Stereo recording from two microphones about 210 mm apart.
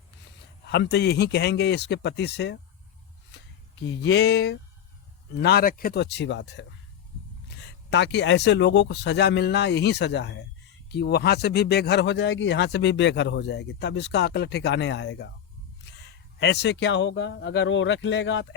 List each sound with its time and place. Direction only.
0.6 s speech: 50° left (ahead or behind)